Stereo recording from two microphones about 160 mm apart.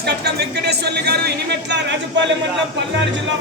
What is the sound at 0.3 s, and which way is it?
Speech, 90° right.